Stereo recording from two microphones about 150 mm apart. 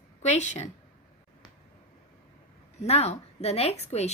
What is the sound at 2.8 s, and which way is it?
A woman's voice, 45° left (ahead or behind).